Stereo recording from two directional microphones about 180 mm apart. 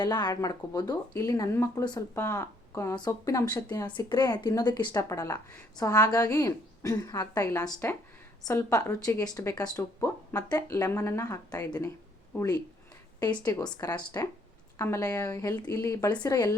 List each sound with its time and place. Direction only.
0.0 s a woman's voice: 25° left (ahead or behind)